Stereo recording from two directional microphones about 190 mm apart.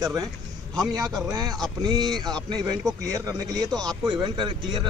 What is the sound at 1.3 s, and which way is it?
Speech, 20° right (ahead or behind).